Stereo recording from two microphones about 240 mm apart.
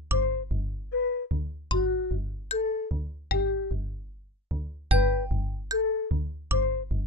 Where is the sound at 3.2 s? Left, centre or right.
Left.